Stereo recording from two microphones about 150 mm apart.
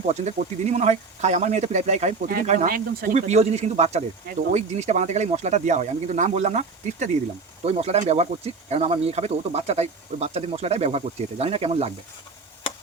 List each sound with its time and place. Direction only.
0.1 s speech: 50° right (ahead or behind)
2.2 s speech: 65° right (ahead or behind)
2.6 s speech: 75° right (ahead or behind)
3.2 s speech: 45° right (ahead or behind)